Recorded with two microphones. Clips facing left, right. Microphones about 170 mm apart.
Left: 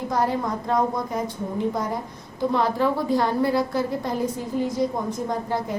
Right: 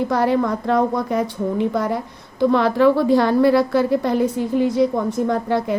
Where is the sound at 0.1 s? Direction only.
70° right (ahead or behind).